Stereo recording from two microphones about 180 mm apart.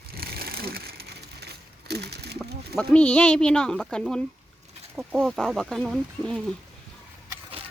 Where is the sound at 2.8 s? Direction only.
5° left (ahead or behind).